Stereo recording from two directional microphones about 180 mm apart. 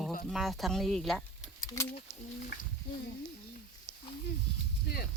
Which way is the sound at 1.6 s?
20° left (ahead or behind).